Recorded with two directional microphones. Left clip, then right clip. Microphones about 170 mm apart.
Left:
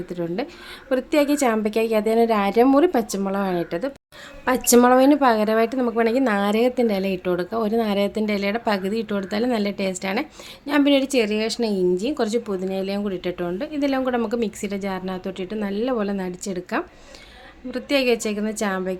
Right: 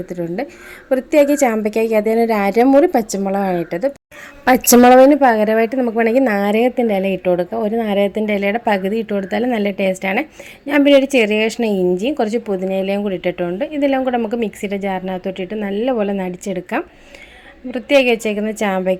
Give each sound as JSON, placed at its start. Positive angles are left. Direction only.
{"t": 0.1, "sound": "a woman's voice", "side_deg": -10}
{"t": 4.4, "sound": "a woman's voice", "side_deg": -35}
{"t": 4.8, "sound": "a woman's voice", "side_deg": -20}
{"t": 12.7, "sound": "speech", "side_deg": 30}
{"t": 13.0, "sound": "a woman's voice", "side_deg": -5}
{"t": 18.3, "sound": "a woman's voice", "side_deg": -15}